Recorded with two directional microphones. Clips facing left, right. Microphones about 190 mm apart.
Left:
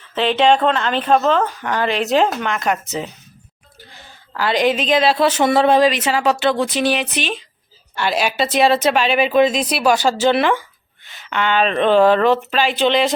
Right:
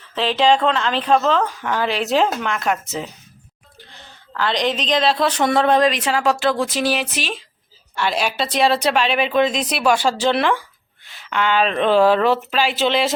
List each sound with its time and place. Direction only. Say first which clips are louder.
0.1 s speech: left 2 dB; centre (ahead or behind)
4.4 s speech: left 4 dB; 5° left (ahead or behind)